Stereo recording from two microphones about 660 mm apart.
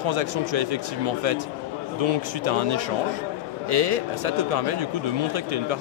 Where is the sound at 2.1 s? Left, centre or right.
Right.